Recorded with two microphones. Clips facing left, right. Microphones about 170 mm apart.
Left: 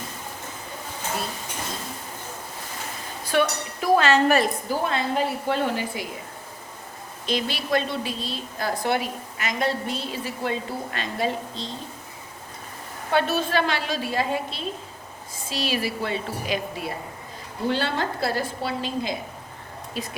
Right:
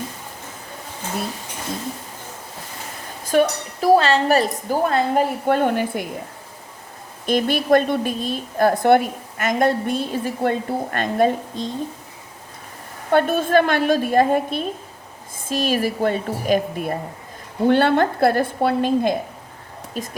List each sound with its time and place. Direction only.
3.2 s a woman's voice: 40° right (ahead or behind)
7.3 s a woman's voice: 50° right (ahead or behind)
13.1 s a woman's voice: 50° right (ahead or behind)